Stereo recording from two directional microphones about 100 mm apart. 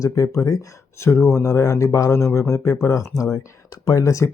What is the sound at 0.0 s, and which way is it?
Speech, 35° left (ahead or behind).